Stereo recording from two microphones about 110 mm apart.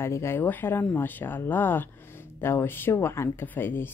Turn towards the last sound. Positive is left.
turn(degrees=20)  # may be behind; listen again after turning